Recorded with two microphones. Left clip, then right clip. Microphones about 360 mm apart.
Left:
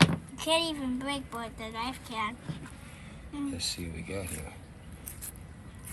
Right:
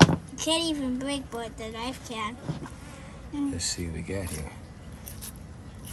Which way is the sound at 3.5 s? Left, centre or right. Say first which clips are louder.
Right 2 dB; right.